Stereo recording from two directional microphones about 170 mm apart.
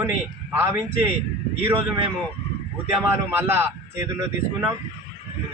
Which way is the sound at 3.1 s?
15° right (ahead or behind).